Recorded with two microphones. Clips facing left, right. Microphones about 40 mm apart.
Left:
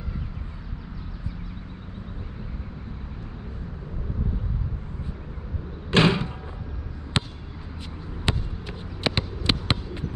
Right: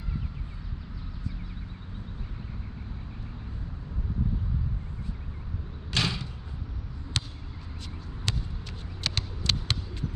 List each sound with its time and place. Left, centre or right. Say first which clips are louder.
5.9 s vehicle: left 10 dB; left
7.2 s a sound: left 6 dB; left
8.3 s basketball bounce: left 6 dB; left